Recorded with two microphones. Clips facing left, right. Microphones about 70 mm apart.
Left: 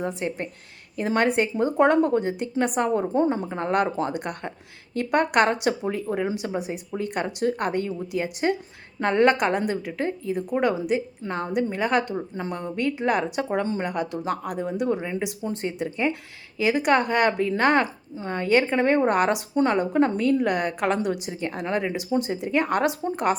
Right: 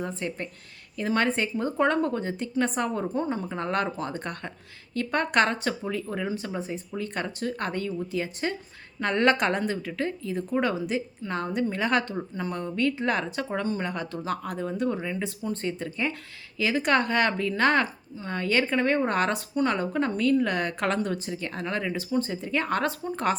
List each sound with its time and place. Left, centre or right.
0.0 s a woman's voice: centre
3.4 s a woman's voice: centre
9.2 s a woman's voice: centre
10.0 s a woman's voice: left
12.4 s a woman's voice: centre
13.6 s speech: left
13.8 s a woman's voice: centre
15.4 s a woman's voice: left
15.8 s a woman's voice: centre